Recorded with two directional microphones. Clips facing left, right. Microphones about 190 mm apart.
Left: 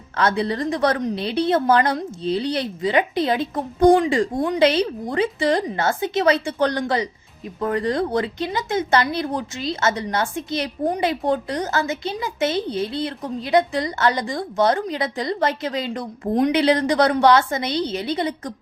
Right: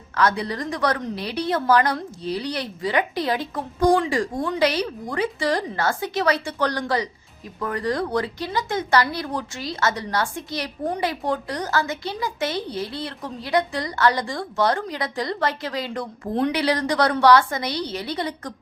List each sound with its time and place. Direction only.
0.2 s speech: 25° left (ahead or behind)